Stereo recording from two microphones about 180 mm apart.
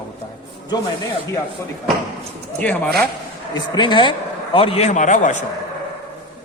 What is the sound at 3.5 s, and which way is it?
A man's voice, 25° left (ahead or behind).